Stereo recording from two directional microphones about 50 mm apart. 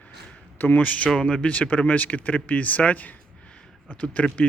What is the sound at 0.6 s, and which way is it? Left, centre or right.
Speech, left.